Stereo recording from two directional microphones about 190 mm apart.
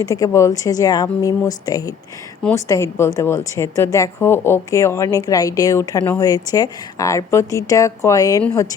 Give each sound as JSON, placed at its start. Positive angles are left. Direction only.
{"t": 0.1, "sound": "a woman's voice", "side_deg": 15}